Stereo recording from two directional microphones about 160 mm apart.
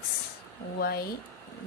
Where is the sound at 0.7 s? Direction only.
75° left (ahead or behind).